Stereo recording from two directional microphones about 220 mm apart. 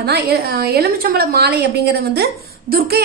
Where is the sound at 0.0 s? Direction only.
45° right (ahead or behind).